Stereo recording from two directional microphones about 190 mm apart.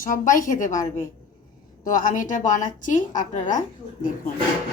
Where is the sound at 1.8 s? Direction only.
45° left (ahead or behind).